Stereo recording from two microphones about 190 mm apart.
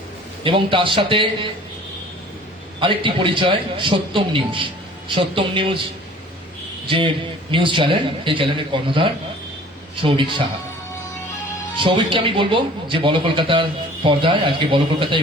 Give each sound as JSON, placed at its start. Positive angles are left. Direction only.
{"t": 0.4, "sound": "speech", "side_deg": -25}
{"t": 2.8, "sound": "speech", "side_deg": -25}
{"t": 6.8, "sound": "a man's voice", "side_deg": -25}
{"t": 11.8, "sound": "speech", "side_deg": -25}